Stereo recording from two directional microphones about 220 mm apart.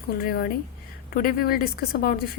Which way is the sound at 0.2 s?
45° left (ahead or behind).